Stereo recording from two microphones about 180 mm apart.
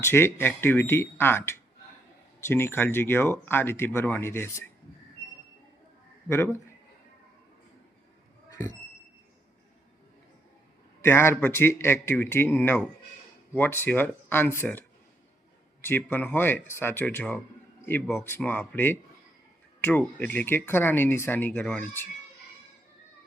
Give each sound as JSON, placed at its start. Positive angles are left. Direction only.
{"t": 0.0, "sound": "speech", "side_deg": 10}
{"t": 6.2, "sound": "speech", "side_deg": 15}
{"t": 8.4, "sound": "a sound", "side_deg": 15}
{"t": 11.0, "sound": "speech", "side_deg": 15}